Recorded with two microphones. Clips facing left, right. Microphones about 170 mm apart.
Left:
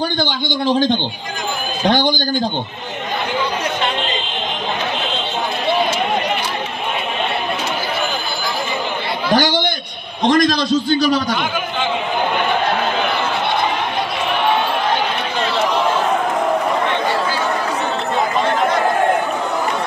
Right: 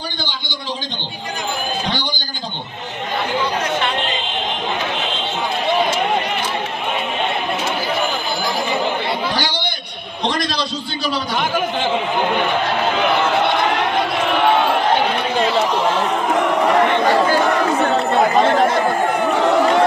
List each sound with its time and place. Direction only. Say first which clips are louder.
0.2 s a man's voice: left 9 dB; 55° left (ahead or behind)
9.3 s a sound: left 7 dB; 50° left (ahead or behind)
10.2 s a man's voice: left 7 dB; 45° left (ahead or behind)